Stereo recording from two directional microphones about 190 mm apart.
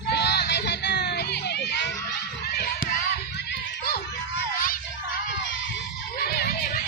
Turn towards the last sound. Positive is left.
turn(degrees=55)  # may be behind; listen again after turning